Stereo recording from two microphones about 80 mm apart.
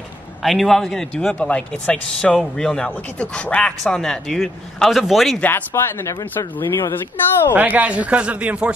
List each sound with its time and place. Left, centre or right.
0.4 s speech: centre
5.4 s speech: left
7.5 s a man's voice: right